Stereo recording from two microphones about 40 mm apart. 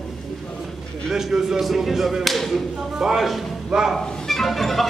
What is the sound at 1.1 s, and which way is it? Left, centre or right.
A man's voice, centre.